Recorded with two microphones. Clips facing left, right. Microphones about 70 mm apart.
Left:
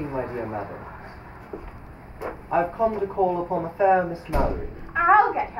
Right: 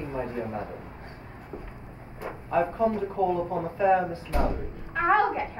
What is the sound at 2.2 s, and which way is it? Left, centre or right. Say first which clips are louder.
Speech: left 3 dB; centre.